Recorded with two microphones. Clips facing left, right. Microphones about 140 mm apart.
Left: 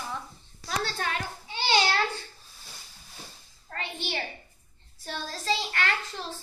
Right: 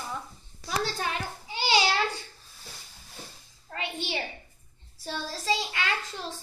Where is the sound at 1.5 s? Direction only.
10° right (ahead or behind).